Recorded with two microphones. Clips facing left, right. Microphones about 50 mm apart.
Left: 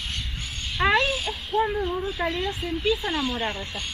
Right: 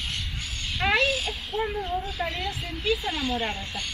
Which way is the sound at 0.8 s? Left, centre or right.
Centre.